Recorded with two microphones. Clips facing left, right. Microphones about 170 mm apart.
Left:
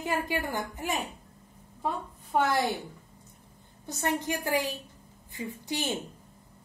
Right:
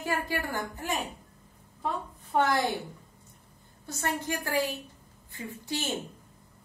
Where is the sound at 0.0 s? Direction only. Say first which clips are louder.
Left 1 dB; 20° left (ahead or behind).